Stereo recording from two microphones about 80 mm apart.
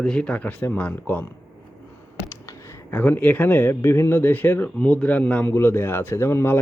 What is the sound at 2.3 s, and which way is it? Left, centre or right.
Speech, left.